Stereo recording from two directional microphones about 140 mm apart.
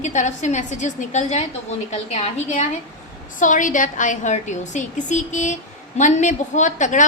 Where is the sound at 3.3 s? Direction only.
65° left (ahead or behind).